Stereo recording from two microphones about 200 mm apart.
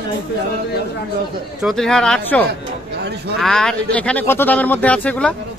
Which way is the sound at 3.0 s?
55° right (ahead or behind).